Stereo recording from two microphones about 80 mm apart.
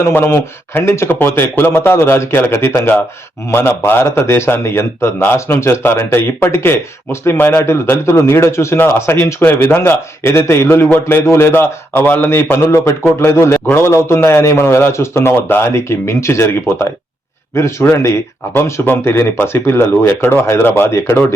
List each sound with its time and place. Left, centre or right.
0.1 s speech: left